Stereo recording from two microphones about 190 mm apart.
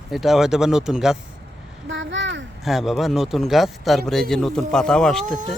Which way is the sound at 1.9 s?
75° right (ahead or behind).